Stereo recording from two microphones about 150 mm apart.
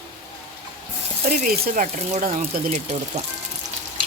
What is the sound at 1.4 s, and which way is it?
Speech, 65° right (ahead or behind).